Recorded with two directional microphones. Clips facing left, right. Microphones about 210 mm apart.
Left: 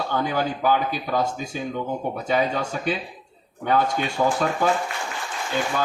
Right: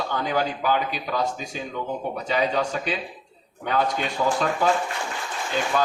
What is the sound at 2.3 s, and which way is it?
Speech, 50° left (ahead or behind).